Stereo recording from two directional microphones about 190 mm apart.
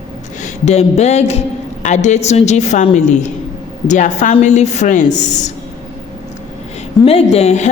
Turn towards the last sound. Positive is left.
turn(degrees=35)  # may be behind; listen again after turning